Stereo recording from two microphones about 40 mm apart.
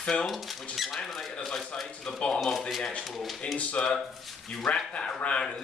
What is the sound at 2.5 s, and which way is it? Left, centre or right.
Speech, centre.